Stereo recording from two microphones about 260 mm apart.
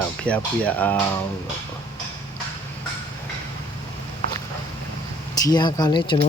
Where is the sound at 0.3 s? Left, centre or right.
Centre.